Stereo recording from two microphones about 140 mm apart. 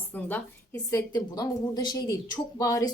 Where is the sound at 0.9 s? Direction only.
25° left (ahead or behind).